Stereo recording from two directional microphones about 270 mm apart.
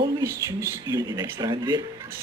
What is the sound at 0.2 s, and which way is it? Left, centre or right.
Speech, centre.